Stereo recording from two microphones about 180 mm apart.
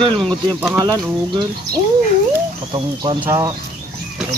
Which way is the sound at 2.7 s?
25° right (ahead or behind).